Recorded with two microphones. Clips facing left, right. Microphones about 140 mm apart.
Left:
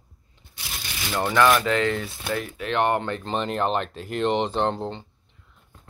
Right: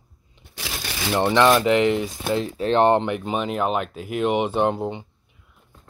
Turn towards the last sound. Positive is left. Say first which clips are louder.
# right 3 dB
turn(degrees=-10)  # may be behind; listen again after turning